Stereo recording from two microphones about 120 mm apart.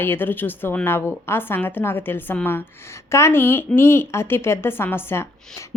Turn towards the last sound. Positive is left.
turn(degrees=20)  # may be behind; listen again after turning